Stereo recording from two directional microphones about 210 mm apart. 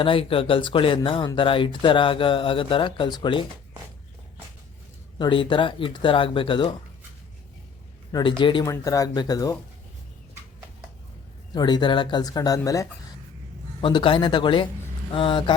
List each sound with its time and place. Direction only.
0.0 s speech: 25° left (ahead or behind)
5.1 s speech: 25° left (ahead or behind)
8.1 s speech: 20° left (ahead or behind)
11.5 s speech: 20° left (ahead or behind)